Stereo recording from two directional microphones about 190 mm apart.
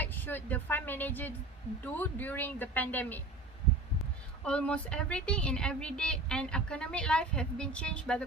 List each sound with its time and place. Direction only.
0.0 s speech: 10° left (ahead or behind)
4.4 s a woman's voice: 5° left (ahead or behind)